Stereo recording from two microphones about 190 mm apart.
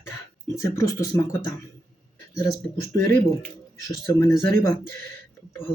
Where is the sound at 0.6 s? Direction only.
15° left (ahead or behind).